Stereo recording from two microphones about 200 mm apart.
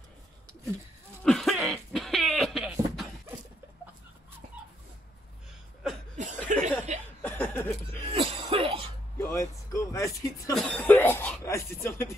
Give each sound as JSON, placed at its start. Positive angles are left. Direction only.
{"t": 1.2, "sound": "cough", "side_deg": 0}
{"t": 6.1, "sound": "chuckle", "side_deg": -35}
{"t": 7.2, "sound": "chuckle", "side_deg": 10}
{"t": 8.1, "sound": "cough", "side_deg": -30}
{"t": 9.2, "sound": "a sound", "side_deg": 15}